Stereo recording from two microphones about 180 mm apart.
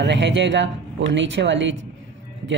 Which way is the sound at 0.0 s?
75° right (ahead or behind).